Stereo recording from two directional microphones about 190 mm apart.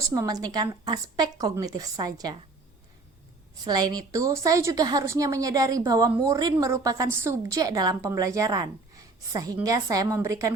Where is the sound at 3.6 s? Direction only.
20° right (ahead or behind).